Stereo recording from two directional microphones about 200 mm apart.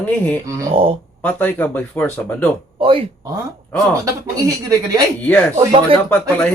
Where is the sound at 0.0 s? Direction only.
10° left (ahead or behind).